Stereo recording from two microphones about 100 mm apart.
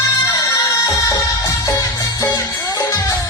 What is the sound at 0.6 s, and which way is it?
Music, 35° left (ahead or behind).